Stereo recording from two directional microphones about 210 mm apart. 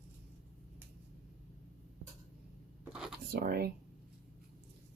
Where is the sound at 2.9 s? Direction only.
5° right (ahead or behind).